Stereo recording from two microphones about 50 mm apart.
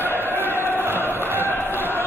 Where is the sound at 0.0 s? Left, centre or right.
Left.